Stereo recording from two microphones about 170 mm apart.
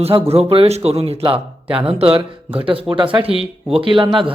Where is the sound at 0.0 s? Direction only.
35° right (ahead or behind).